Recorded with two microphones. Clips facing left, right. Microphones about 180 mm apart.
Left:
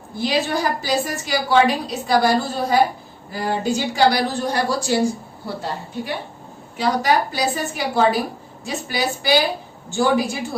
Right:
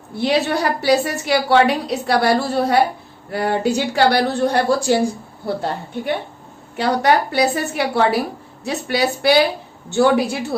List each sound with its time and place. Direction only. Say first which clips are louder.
0.2 s a woman's voice: right 3 dB; 65° right (ahead or behind)